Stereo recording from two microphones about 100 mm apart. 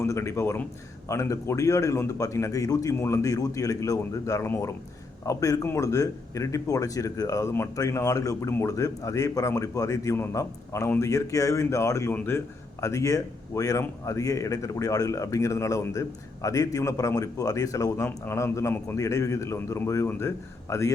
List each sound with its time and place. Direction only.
0.0 s a man's voice: 30° left (ahead or behind)
12.8 s a man's voice: 30° left (ahead or behind)